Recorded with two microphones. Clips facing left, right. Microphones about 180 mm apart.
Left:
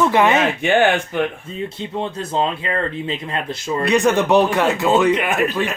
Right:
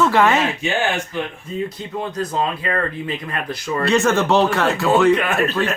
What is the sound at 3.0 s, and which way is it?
Speech, 25° left (ahead or behind).